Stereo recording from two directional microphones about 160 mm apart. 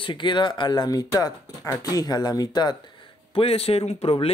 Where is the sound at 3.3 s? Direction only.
35° left (ahead or behind).